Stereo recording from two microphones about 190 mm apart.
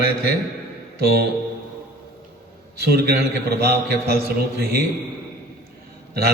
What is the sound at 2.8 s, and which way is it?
A man's voice, 55° right (ahead or behind).